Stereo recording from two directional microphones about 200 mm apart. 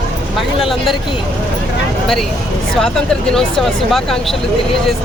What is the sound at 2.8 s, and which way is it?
Speech, centre (ahead or behind).